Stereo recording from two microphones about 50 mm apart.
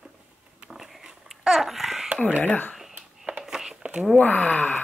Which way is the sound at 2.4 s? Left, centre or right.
Left.